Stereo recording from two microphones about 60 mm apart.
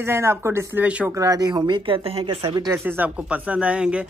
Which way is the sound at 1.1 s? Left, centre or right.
Right.